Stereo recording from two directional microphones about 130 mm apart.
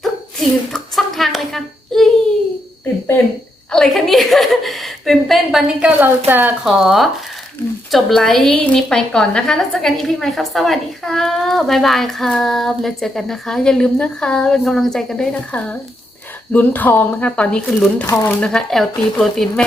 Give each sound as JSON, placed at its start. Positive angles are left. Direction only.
{"t": 0.0, "sound": "a sound", "side_deg": 0}
{"t": 3.7, "sound": "a woman's voice", "side_deg": 5}
{"t": 6.7, "sound": "a woman's voice", "side_deg": 0}
{"t": 18.0, "sound": "speech", "side_deg": 20}
{"t": 18.3, "sound": "a woman's voice", "side_deg": 5}